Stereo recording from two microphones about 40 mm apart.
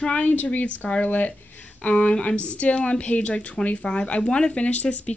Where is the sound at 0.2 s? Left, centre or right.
Left.